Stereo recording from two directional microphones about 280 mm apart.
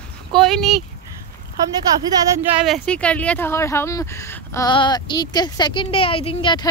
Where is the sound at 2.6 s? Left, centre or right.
Centre.